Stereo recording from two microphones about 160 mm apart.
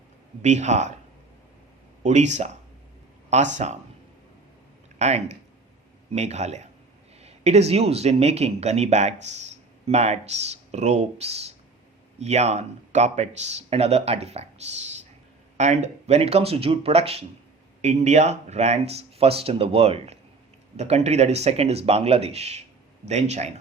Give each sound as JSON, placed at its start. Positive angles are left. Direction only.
{"t": 0.4, "sound": "speech", "side_deg": -45}
{"t": 2.0, "sound": "speech", "side_deg": -45}
{"t": 4.9, "sound": "speech", "side_deg": -45}